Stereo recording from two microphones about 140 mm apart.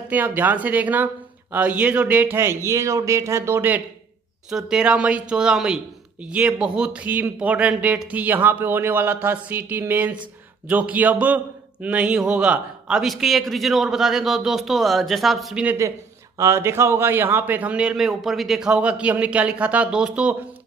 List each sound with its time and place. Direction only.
0.1 s a man's voice: 15° right (ahead or behind)
4.5 s a man's voice: 5° right (ahead or behind)
15.6 s a man's voice: 15° right (ahead or behind)